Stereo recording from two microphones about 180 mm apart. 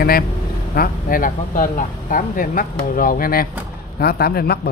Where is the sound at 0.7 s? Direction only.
55° left (ahead or behind).